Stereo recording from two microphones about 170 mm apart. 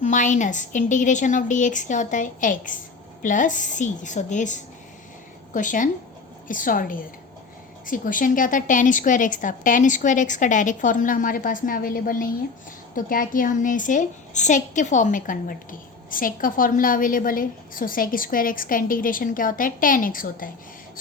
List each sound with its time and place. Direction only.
0.0 s a woman's voice: 45° left (ahead or behind)